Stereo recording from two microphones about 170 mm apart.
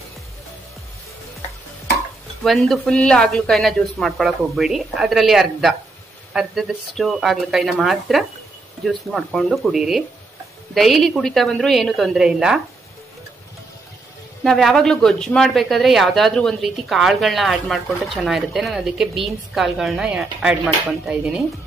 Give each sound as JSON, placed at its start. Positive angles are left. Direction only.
{"t": 2.4, "sound": "speech", "side_deg": 0}
{"t": 14.4, "sound": "speech", "side_deg": 0}